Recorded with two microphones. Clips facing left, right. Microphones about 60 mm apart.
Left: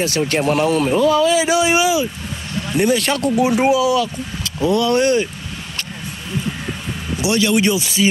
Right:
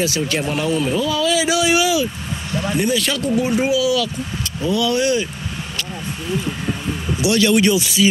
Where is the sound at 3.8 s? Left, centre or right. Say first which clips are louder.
Left 2 dB; left.